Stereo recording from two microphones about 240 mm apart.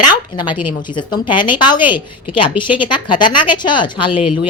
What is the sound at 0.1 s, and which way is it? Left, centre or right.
A woman's voice, centre.